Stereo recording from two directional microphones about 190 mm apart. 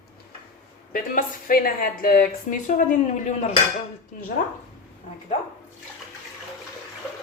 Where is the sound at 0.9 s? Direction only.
45° left (ahead or behind).